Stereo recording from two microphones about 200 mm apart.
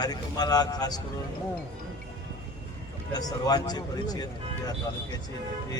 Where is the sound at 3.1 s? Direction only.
20° left (ahead or behind).